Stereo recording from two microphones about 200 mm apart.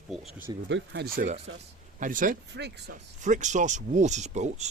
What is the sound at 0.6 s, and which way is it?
Speech, 65° right (ahead or behind).